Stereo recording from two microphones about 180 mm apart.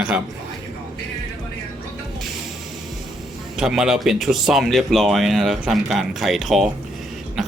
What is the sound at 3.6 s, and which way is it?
Speech, 5° right (ahead or behind).